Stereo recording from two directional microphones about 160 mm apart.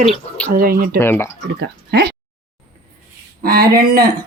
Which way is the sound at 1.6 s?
85° right.